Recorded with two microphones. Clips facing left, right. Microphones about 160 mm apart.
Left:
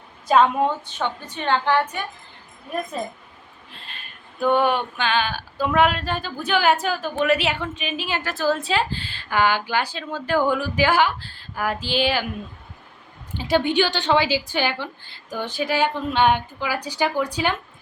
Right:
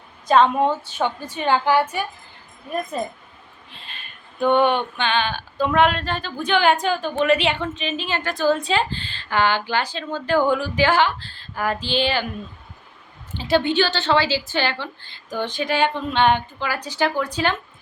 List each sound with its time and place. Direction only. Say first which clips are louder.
0.9 s a woman's voice: right 3 dB; 10° right (ahead or behind)
3.7 s speech: even; centre (ahead or behind)
13.3 s speech: right 1 dB; 10° left (ahead or behind)